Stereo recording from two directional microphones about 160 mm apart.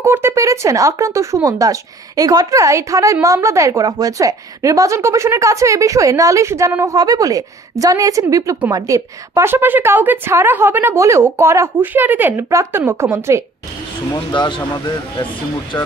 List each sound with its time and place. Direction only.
0.0 s a woman's voice: 15° right (ahead or behind)
14.1 s speech: 30° left (ahead or behind)